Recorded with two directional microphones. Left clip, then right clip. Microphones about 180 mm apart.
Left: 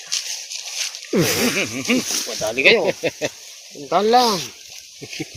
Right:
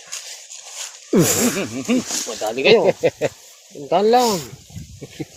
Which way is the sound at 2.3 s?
30° right (ahead or behind).